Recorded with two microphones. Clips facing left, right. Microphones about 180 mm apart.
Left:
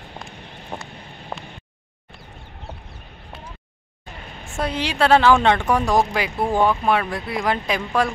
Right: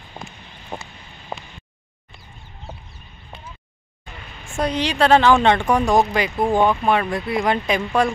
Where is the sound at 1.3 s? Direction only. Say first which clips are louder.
Right 1 dB; 10° right (ahead or behind).